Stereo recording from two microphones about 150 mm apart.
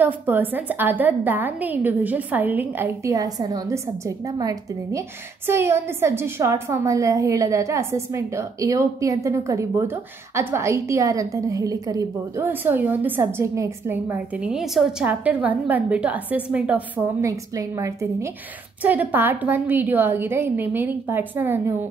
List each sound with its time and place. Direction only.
0.0 s a woman's voice: 15° right (ahead or behind)
17.2 s a woman's voice: 20° right (ahead or behind)